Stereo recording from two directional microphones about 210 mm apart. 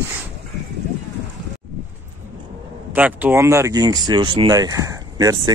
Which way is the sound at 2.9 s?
10° right (ahead or behind).